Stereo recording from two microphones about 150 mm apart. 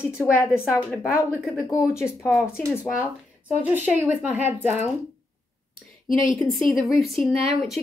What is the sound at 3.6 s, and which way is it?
A woman's voice, 10° right (ahead or behind).